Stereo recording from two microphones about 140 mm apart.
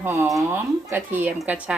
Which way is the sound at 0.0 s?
15° right (ahead or behind).